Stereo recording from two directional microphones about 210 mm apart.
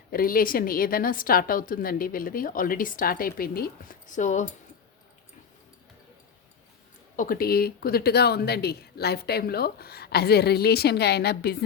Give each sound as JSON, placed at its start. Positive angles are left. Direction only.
{"t": 0.1, "sound": "a woman's voice", "side_deg": 45}
{"t": 7.2, "sound": "a woman's voice", "side_deg": 45}